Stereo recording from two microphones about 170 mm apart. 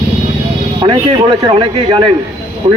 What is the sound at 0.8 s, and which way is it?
Speech, 30° right (ahead or behind).